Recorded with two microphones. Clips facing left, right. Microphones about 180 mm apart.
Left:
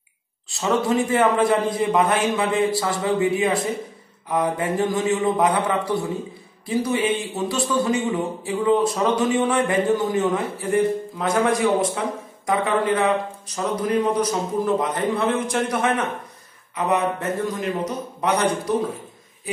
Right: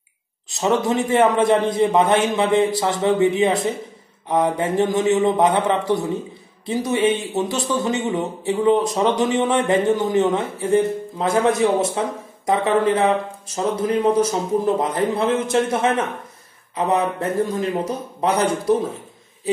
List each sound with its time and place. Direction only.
0.5 s a man's voice: 20° right (ahead or behind)